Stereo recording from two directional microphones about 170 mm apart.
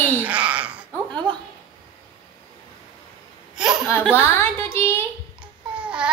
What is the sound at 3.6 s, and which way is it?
Chuckle, 5° right (ahead or behind).